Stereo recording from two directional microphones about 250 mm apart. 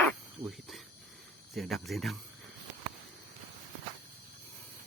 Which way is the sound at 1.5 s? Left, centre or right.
Centre.